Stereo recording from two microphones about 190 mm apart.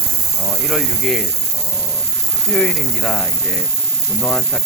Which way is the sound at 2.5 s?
Centre (ahead or behind).